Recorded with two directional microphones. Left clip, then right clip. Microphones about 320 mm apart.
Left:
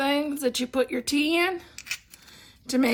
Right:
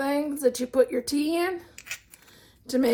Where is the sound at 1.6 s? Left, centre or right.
Centre.